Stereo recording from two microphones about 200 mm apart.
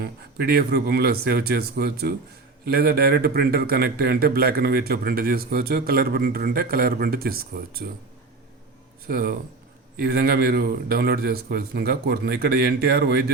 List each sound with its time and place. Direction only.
0.0 s a man's voice: 50° right (ahead or behind)
9.0 s a man's voice: 45° right (ahead or behind)